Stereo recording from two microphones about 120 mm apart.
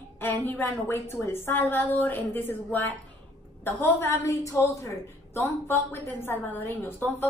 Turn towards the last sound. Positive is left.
turn(degrees=15)  # may be behind; listen again after turning